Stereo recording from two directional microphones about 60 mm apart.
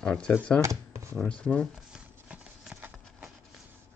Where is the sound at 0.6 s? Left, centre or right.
Right.